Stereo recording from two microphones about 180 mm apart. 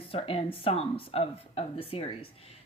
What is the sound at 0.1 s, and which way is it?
Speech, 30° left (ahead or behind).